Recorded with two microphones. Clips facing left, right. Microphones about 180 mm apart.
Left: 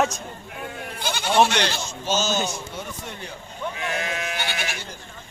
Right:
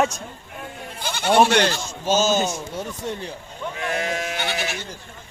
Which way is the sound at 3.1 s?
35° right (ahead or behind).